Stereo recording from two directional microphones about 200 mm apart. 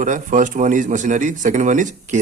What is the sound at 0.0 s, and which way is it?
Speech, 40° right (ahead or behind).